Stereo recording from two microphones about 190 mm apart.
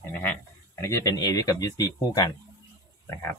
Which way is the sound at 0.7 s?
15° left (ahead or behind).